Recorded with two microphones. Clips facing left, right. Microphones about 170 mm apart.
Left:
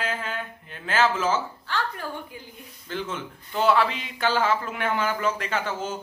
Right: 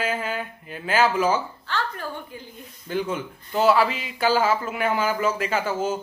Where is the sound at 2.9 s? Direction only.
10° right (ahead or behind).